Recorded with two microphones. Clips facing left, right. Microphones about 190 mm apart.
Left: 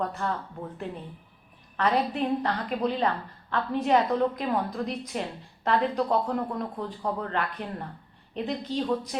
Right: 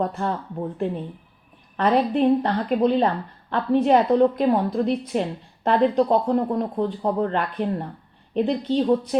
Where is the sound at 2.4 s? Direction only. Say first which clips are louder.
Right 7 dB; 30° right (ahead or behind).